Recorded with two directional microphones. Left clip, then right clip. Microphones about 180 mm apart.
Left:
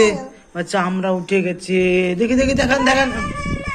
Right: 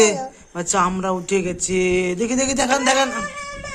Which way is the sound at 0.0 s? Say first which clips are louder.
Left 1 dB; 30° right (ahead or behind).